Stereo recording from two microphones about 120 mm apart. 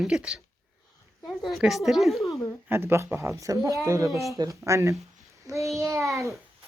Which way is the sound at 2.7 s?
20° right (ahead or behind).